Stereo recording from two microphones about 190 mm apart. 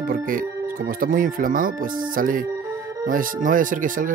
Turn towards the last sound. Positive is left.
turn(degrees=-45)  # may be behind; listen again after turning